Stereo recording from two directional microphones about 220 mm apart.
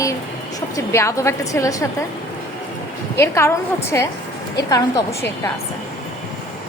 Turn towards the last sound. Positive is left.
turn(degrees=15)  # may be behind; listen again after turning